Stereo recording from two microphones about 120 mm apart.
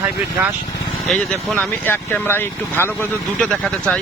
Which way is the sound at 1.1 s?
15° left (ahead or behind).